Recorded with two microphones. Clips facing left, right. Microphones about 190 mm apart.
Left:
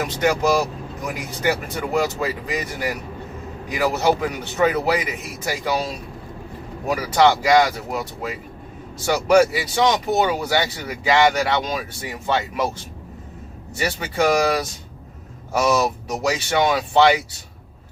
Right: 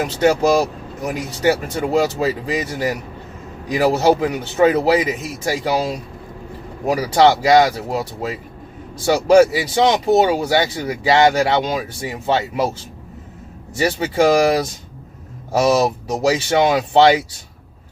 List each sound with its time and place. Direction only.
0.0 s a man's voice: 30° right (ahead or behind)
6.8 s a man's voice: 30° right (ahead or behind)
13.7 s a man's voice: 30° right (ahead or behind)